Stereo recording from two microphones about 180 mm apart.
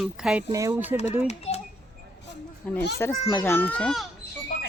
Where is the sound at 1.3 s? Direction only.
35° left (ahead or behind).